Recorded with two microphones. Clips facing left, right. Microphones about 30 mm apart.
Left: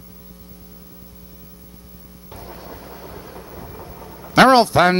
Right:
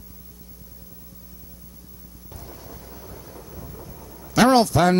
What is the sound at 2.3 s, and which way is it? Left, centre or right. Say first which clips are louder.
Thunder: left 6 dB; left.